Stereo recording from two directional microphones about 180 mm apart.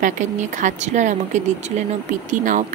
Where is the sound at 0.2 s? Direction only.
40° right (ahead or behind).